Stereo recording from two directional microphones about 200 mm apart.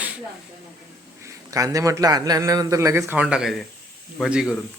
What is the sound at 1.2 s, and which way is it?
A man's voice, 15° right (ahead or behind).